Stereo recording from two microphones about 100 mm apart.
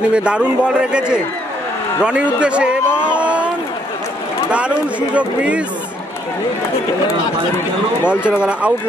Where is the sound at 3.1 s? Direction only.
10° right (ahead or behind).